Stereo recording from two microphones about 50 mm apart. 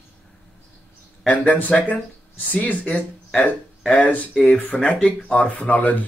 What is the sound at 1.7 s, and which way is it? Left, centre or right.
Speech, centre.